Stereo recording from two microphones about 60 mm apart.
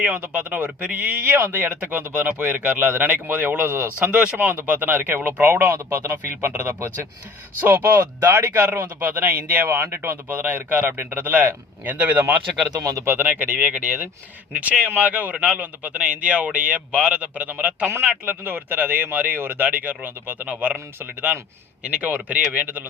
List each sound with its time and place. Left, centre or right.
0.0 s speech: right
1.3 s speech: right
3.7 s speech: right
4.1 s speech: centre; by 7.1 s right
7.6 s speech: right
7.9 s speech: right
9.0 s speech: right
12.7 s speech: right
13.1 s speech: right